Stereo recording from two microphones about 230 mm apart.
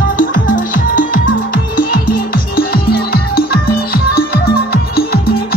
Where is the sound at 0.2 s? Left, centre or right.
Left.